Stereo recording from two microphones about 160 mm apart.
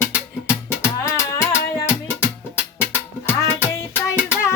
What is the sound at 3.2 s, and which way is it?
Music, 20° left (ahead or behind).